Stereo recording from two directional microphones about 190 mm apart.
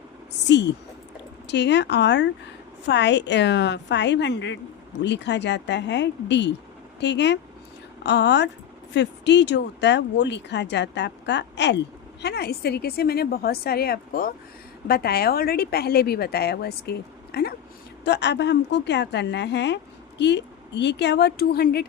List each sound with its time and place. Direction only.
0.4 s a woman's voice: 70° left (ahead or behind)